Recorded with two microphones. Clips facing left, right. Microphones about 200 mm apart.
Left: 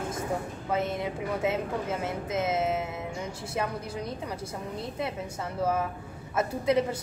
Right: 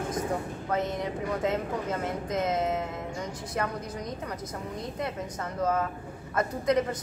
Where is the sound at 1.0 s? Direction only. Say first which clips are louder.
Even; 5° left (ahead or behind).